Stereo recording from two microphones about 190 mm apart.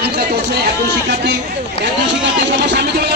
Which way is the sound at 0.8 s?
65° right (ahead or behind).